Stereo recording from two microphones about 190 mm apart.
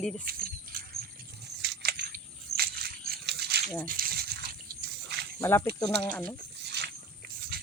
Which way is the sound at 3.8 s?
50° right (ahead or behind).